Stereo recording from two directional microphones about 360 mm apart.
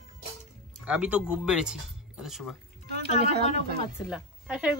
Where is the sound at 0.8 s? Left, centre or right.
Centre.